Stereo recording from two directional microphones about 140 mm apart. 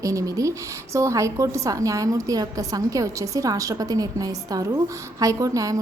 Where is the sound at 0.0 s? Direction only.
25° right (ahead or behind).